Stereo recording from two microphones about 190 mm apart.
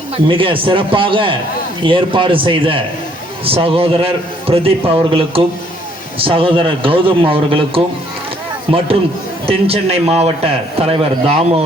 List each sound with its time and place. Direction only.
0.3 s a man's voice: 25° right (ahead or behind)